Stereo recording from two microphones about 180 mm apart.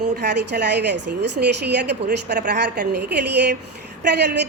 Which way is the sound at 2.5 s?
70° right (ahead or behind).